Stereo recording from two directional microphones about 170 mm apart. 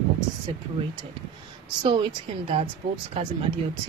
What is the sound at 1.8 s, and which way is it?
Speech, 30° right (ahead or behind).